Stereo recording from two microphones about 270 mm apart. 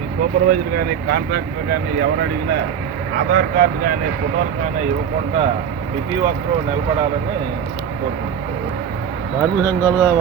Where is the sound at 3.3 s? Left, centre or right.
Right.